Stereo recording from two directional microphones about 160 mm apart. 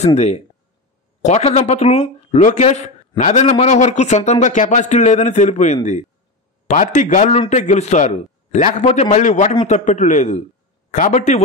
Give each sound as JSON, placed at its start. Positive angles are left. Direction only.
{"t": 0.0, "sound": "a man's voice", "side_deg": 45}